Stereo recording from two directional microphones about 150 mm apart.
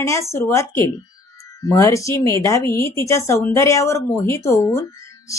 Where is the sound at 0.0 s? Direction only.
20° left (ahead or behind).